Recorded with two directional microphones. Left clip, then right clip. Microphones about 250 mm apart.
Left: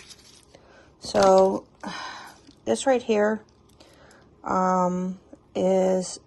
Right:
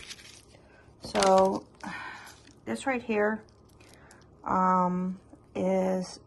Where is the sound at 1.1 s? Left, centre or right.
Centre.